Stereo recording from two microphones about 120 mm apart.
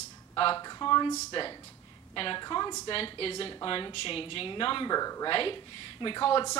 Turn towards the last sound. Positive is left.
turn(degrees=40)  # may be behind; listen again after turning